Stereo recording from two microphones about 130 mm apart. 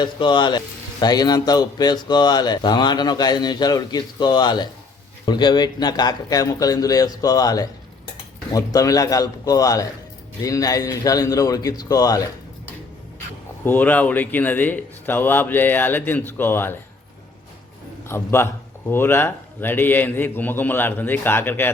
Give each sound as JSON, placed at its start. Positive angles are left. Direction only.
{"t": 0.0, "sound": "a man's voice", "side_deg": 35}
{"t": 13.7, "sound": "speech", "side_deg": 15}
{"t": 18.1, "sound": "a man's voice", "side_deg": 20}